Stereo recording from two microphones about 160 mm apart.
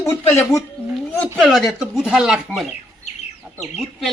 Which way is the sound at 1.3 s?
Centre (ahead or behind).